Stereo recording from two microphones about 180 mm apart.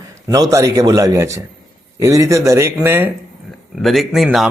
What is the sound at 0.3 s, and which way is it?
A man's voice, 20° right (ahead or behind).